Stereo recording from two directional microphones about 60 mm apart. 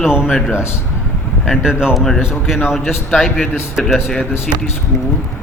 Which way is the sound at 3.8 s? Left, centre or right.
Centre.